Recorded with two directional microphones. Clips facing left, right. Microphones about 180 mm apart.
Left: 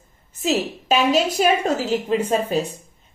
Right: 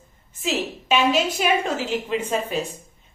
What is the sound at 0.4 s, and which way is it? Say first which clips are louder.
A woman's voice: left 4 dB; 40° left (ahead or behind).